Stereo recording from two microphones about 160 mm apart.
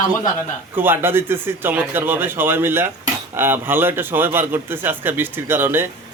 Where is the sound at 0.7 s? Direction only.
15° right (ahead or behind).